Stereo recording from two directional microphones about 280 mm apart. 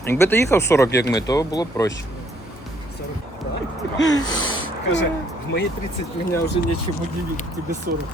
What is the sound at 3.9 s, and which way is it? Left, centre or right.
Speech, left.